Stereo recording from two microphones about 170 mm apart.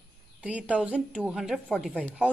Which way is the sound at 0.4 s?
5° right (ahead or behind).